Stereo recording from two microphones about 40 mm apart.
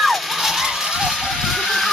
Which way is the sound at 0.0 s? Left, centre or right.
Centre.